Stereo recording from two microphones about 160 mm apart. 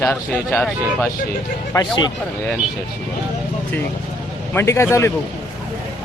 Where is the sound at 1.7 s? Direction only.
25° left (ahead or behind).